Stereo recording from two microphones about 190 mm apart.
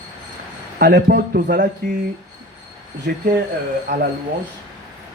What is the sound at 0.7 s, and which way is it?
Speech, 55° right (ahead or behind).